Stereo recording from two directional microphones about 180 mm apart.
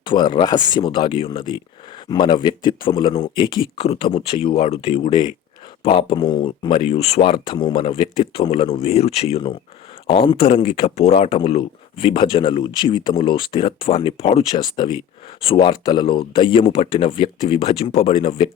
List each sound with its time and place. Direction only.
0.0 s speech: 25° left (ahead or behind)